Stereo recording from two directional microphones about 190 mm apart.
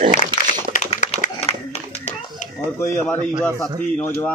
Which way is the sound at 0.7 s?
40° left (ahead or behind).